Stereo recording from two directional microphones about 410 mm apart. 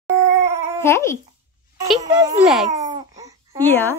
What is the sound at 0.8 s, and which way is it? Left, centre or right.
Speech, centre.